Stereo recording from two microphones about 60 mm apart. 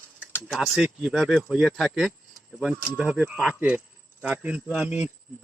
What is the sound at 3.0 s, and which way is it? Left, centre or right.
Speech, right.